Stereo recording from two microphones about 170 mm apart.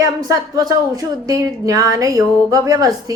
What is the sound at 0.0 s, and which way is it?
Speech, 20° right (ahead or behind).